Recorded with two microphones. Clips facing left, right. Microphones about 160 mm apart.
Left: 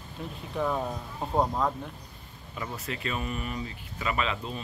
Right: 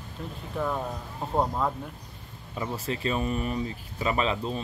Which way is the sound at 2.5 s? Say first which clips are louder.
Right 5 dB; 30° right (ahead or behind).